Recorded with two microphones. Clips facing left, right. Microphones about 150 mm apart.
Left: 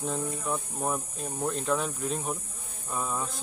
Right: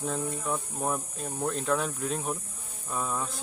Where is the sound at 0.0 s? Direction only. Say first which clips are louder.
Even; centre (ahead or behind).